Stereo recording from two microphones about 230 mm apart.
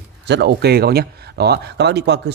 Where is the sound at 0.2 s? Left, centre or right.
Right.